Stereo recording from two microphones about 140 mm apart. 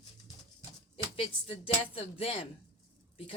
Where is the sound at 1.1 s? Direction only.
40° left (ahead or behind).